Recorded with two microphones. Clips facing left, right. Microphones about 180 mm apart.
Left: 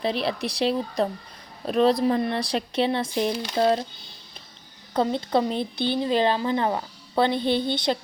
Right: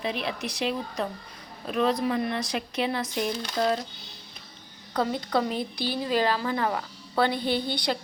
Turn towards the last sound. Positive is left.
turn(degrees=20)  # may be behind; listen again after turning